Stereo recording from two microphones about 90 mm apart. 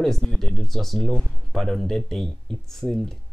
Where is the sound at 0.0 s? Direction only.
5° left (ahead or behind).